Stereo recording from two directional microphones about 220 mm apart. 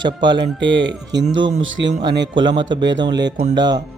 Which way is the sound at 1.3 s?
60° right (ahead or behind).